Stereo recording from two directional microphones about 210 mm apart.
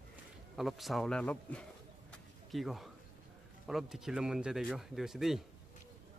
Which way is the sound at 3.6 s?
Centre (ahead or behind).